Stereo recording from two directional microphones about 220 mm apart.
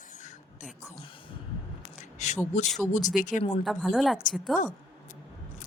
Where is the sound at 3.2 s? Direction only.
35° left (ahead or behind).